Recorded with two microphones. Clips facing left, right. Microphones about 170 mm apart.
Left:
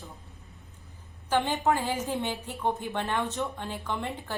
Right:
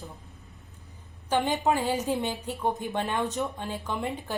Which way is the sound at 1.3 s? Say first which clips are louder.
Right 1 dB; 15° right (ahead or behind).